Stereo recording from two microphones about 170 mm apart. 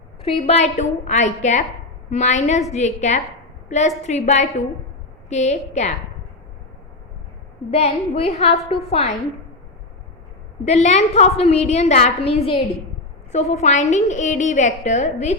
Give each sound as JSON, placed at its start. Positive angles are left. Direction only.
{"t": 0.2, "sound": "a woman's voice", "side_deg": 35}
{"t": 7.7, "sound": "a woman's voice", "side_deg": 35}
{"t": 10.7, "sound": "a woman's voice", "side_deg": 40}